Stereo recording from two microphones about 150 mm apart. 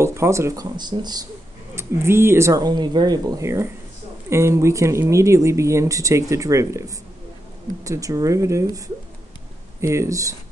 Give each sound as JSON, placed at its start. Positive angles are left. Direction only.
{"t": 0.0, "sound": "speech", "side_deg": -20}
{"t": 1.8, "sound": "speech", "side_deg": -15}